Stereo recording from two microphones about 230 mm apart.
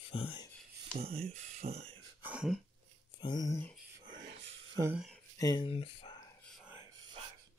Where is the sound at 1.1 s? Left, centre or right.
Right.